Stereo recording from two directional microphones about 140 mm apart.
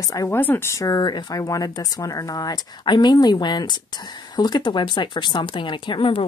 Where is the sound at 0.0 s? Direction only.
25° left (ahead or behind).